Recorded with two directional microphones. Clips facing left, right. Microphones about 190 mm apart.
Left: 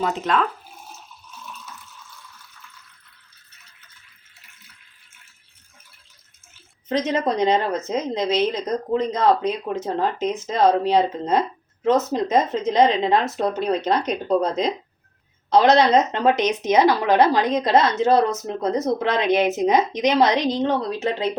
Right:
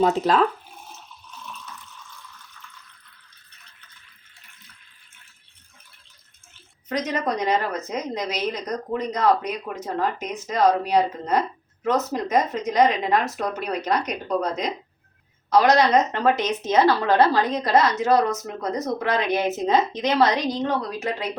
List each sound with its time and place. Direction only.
0.0 s speech: 35° right (ahead or behind)
1.3 s a sound: 5° left (ahead or behind)
6.8 s speech: 25° left (ahead or behind)